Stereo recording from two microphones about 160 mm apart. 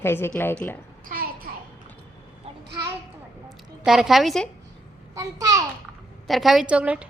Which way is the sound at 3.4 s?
5° right (ahead or behind).